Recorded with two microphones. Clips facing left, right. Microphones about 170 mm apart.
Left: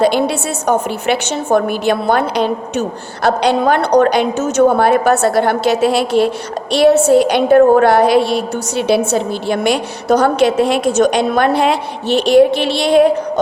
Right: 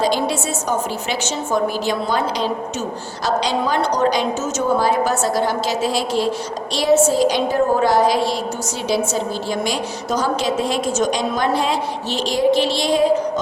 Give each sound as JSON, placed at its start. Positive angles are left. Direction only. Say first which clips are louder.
{"t": 0.0, "sound": "a woman's voice", "louder": "left 5 dB", "side_deg": 65}